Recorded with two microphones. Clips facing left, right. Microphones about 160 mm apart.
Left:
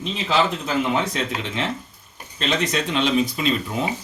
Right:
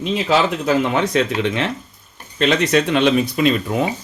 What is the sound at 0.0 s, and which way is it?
Speech, 70° right (ahead or behind).